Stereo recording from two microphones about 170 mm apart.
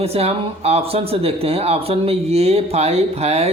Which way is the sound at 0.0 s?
35° right (ahead or behind).